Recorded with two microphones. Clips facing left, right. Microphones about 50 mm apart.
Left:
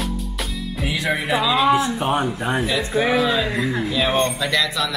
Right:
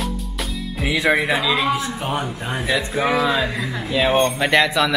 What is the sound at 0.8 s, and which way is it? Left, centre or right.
Speech, right.